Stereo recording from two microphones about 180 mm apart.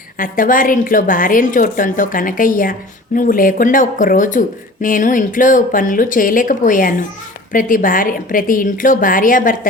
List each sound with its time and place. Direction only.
0.2 s speech: 50° left (ahead or behind)